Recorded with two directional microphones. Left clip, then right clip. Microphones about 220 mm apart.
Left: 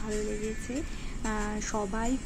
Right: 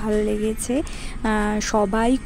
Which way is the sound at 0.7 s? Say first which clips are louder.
Right 12 dB; 55° right (ahead or behind).